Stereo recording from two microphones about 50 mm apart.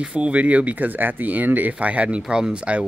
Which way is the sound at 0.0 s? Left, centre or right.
Right.